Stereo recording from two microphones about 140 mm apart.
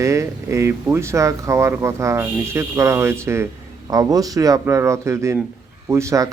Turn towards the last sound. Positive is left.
turn(degrees=-20)  # may be behind; listen again after turning